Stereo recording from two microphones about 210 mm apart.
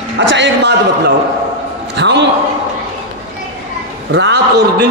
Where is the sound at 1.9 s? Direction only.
55° right (ahead or behind).